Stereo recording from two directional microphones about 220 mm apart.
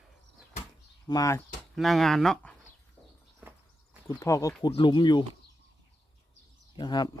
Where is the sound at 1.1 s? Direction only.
15° left (ahead or behind).